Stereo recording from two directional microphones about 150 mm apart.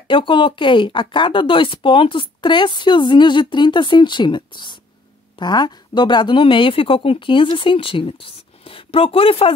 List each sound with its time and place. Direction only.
0.1 s a woman's voice: 35° left (ahead or behind)